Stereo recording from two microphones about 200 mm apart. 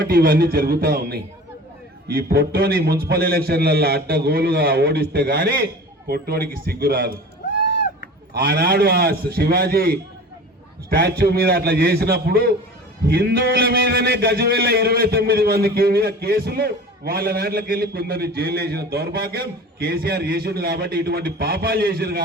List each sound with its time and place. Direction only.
0.0 s a man's voice: 45° right (ahead or behind)
8.3 s a man's voice: 50° right (ahead or behind)